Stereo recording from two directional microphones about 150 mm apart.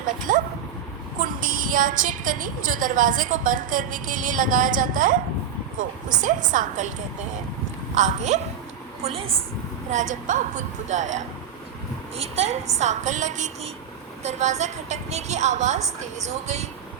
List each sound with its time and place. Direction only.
0.3 s a woman's voice: 60° right (ahead or behind)
7.9 s a woman's voice: 50° right (ahead or behind)
9.0 s a woman's voice: 40° right (ahead or behind)
9.9 s a woman's voice: 55° right (ahead or behind)